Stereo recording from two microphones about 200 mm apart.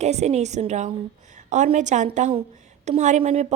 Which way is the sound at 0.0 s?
35° right (ahead or behind).